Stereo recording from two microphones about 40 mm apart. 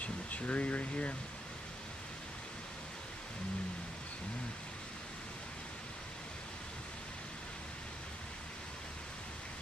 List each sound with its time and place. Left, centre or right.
0.0 s speech: left